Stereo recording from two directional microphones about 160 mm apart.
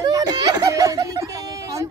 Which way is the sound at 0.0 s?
25° right (ahead or behind).